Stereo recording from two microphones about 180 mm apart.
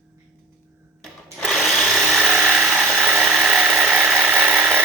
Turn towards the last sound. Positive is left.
turn(degrees=-5)  # may be behind; listen again after turning